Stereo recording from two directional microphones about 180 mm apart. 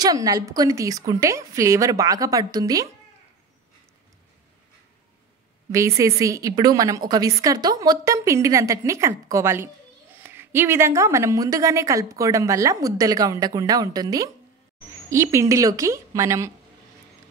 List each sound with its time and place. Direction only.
0.0 s a woman's voice: 20° right (ahead or behind)
5.7 s a woman's voice: 15° right (ahead or behind)